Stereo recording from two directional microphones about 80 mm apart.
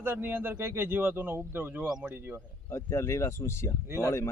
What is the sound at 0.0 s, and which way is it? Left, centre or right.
Speech, right.